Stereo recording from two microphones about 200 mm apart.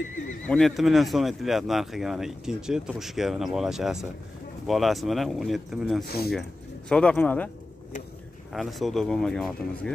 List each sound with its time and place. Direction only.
0.5 s speech: centre (ahead or behind)
6.0 s speech: 50° left (ahead or behind)
6.9 s speech: 5° left (ahead or behind)
8.5 s speech: centre (ahead or behind)